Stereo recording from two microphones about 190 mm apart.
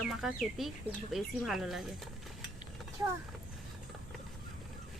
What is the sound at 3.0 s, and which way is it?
Speech, 15° right (ahead or behind).